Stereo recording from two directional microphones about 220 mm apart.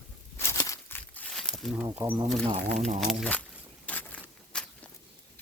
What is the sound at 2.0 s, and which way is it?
Speech, 5° right (ahead or behind).